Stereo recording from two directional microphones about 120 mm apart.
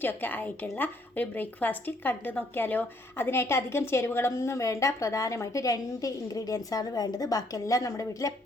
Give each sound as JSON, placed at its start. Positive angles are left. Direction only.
{"t": 0.0, "sound": "a woman's voice", "side_deg": 15}